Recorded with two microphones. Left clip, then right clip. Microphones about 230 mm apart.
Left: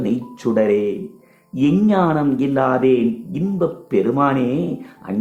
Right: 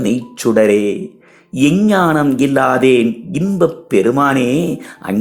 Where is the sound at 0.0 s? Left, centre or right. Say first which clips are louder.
Right 5 dB; right.